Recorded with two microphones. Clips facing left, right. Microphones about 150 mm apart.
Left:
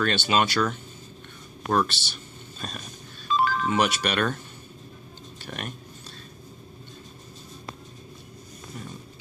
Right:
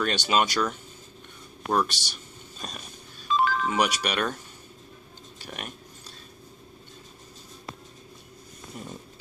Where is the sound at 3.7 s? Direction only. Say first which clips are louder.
Left 2 dB; 10° right (ahead or behind).